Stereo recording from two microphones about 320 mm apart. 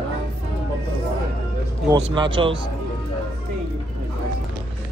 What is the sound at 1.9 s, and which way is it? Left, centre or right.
Speech, centre.